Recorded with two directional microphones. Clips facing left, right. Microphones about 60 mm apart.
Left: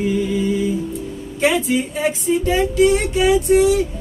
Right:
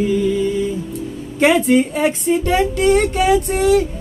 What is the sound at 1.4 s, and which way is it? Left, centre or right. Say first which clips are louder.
Speech: right 5 dB; right.